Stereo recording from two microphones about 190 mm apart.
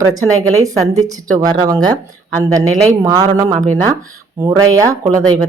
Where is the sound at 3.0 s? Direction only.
20° right (ahead or behind).